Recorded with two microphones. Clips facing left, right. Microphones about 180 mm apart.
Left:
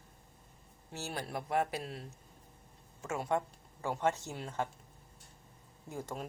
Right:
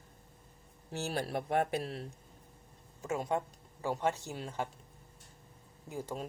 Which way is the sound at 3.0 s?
15° right (ahead or behind).